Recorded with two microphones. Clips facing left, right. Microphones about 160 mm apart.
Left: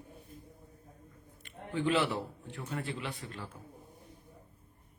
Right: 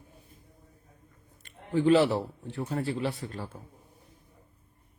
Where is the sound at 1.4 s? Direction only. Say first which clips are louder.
Right 7 dB; 35° right (ahead or behind).